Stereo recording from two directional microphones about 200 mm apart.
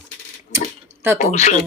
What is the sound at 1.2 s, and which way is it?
Speech, 35° left (ahead or behind).